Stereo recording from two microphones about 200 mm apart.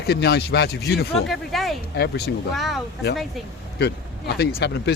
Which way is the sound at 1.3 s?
Centre (ahead or behind).